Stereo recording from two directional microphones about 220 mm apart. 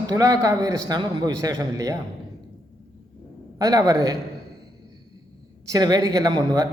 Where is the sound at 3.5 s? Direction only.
15° right (ahead or behind).